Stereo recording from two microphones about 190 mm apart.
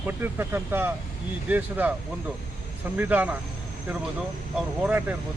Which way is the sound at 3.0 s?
10° right (ahead or behind).